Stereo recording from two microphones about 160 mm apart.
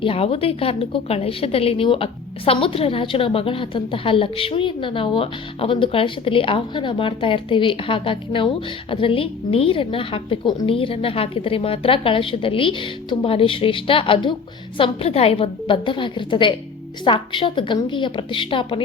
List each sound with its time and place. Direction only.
0.0 s a woman's voice: 35° left (ahead or behind)